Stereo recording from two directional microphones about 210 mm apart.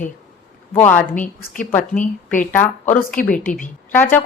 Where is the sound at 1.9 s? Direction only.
40° left (ahead or behind).